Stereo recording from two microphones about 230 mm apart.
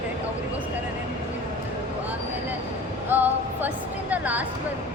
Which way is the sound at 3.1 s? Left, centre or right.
Centre.